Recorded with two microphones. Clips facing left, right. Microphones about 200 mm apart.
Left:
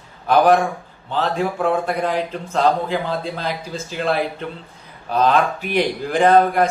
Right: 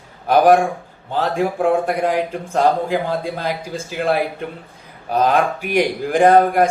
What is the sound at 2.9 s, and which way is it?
Speech, 45° right (ahead or behind).